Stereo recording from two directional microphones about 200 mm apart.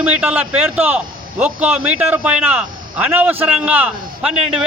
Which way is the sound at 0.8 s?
10° right (ahead or behind).